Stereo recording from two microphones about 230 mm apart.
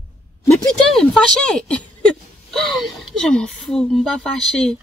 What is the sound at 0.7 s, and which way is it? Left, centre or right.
Speech, centre.